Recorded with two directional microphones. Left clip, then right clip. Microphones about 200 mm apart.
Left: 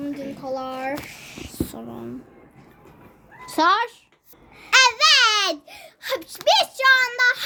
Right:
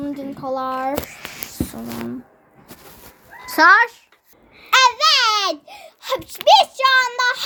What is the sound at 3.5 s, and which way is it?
Speech, centre (ahead or behind).